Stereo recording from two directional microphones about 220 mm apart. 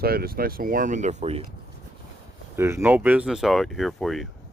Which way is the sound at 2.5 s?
10° right (ahead or behind).